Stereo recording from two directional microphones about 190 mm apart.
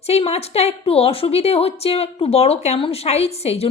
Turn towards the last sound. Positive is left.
turn(degrees=35)  # may be behind; listen again after turning